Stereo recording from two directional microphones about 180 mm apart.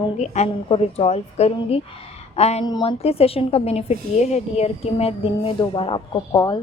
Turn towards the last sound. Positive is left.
turn(degrees=25)  # may be behind; listen again after turning